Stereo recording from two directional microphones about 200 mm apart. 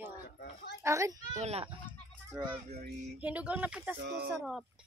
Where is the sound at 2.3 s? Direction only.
15° right (ahead or behind).